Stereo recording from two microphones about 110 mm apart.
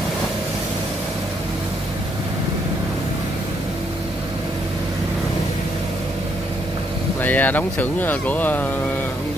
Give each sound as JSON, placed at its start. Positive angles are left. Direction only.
{"t": 7.2, "sound": "speech", "side_deg": 15}